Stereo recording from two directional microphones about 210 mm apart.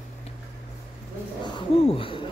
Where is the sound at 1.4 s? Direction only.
25° left (ahead or behind).